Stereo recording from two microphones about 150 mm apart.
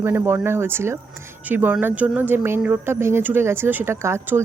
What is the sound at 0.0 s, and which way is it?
Speech, 15° right (ahead or behind).